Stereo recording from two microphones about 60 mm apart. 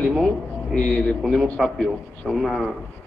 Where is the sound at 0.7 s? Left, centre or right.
Centre.